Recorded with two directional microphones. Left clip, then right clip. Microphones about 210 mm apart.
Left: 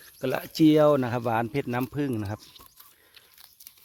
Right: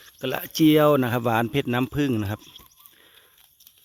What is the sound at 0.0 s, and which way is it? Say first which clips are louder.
Speech: even; 5° right (ahead or behind).